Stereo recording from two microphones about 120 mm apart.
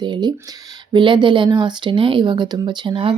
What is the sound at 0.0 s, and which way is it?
Female singing, 40° right (ahead or behind).